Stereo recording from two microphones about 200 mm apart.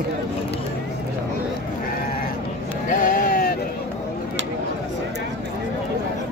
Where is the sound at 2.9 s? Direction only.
40° left (ahead or behind).